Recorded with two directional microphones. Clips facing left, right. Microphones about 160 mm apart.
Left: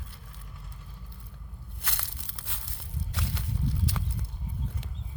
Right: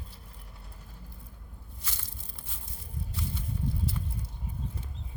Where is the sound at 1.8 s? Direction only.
70° left (ahead or behind).